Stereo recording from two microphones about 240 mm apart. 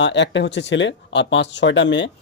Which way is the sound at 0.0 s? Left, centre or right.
Left.